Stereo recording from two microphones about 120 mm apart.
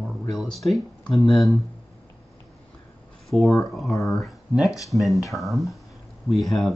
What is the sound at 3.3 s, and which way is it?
Speech, centre (ahead or behind).